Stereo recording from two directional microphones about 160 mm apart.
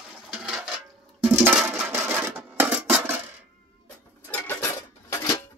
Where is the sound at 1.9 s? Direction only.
15° right (ahead or behind).